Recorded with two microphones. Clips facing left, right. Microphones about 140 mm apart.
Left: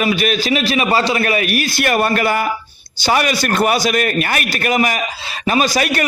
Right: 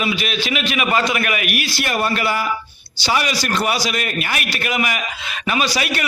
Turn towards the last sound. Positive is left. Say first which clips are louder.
# left 5 dB
turn(degrees=45)  # may be behind; listen again after turning